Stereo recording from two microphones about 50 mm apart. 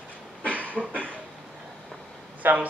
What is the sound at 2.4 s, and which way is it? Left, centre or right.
Speech, right.